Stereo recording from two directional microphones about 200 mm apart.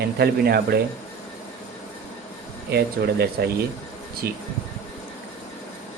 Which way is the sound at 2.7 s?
50° right (ahead or behind).